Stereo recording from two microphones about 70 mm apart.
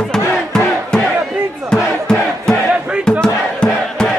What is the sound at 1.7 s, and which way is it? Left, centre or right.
Crowd, centre.